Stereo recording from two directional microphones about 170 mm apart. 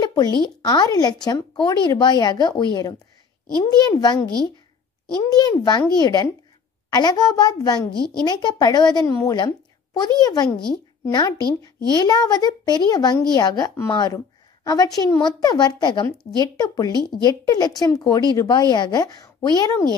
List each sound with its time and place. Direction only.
0.0 s speech: 25° left (ahead or behind)
5.4 s speech: 25° left (ahead or behind)
10.5 s speech: 5° left (ahead or behind)
11.1 s speech: 25° left (ahead or behind)